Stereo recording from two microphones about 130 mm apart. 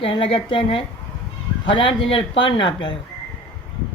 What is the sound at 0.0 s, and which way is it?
Speech, 40° left (ahead or behind).